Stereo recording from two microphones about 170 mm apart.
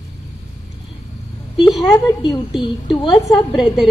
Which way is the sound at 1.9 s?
20° left (ahead or behind).